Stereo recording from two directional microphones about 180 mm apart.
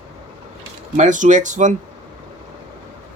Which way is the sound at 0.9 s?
45° right (ahead or behind).